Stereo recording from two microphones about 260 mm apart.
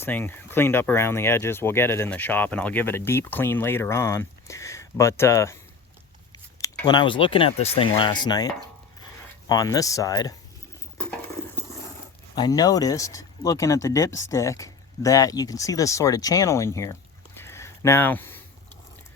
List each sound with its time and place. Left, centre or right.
0.0 s speech: centre
12.4 s speech: centre